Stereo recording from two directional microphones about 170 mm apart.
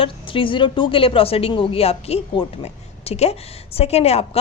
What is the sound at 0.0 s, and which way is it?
A woman's voice, 30° left (ahead or behind).